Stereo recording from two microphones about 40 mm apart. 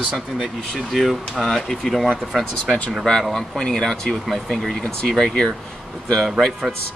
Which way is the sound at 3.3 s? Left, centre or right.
Centre.